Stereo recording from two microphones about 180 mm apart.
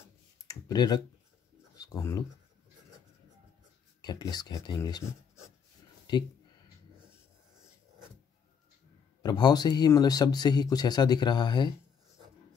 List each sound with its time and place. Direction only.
0.5 s clicking: 20° left (ahead or behind)
1.8 s speech: 15° left (ahead or behind)
4.0 s speech: 25° left (ahead or behind)
6.1 s speech: 25° left (ahead or behind)
9.2 s speech: 20° left (ahead or behind)